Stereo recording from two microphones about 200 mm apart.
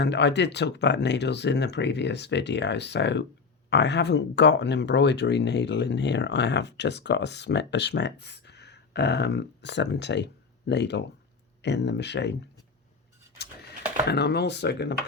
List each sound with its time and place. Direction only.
0.0 s speech: 60° left (ahead or behind)
14.1 s speech: 55° left (ahead or behind)